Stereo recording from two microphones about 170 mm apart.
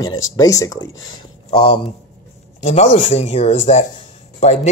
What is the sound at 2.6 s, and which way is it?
Speech, 45° left (ahead or behind).